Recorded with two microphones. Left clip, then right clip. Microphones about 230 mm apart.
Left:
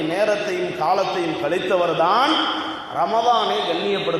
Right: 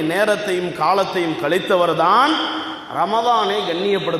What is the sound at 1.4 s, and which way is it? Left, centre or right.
A man's voice, right.